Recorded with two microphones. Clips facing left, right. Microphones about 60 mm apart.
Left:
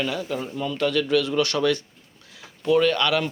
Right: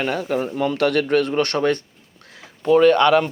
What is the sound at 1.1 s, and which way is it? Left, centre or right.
Speech, right.